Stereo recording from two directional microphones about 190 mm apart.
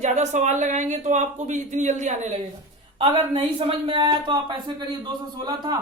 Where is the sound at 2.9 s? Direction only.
25° right (ahead or behind).